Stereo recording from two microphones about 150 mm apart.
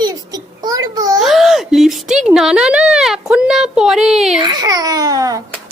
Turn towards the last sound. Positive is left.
turn(degrees=-25)  # may be behind; listen again after turning